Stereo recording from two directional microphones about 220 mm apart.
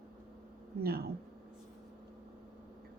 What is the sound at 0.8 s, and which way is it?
Speech, 45° right (ahead or behind).